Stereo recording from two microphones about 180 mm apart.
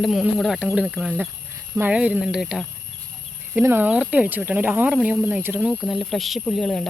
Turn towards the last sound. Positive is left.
turn(degrees=0)  # may be behind; listen again after turning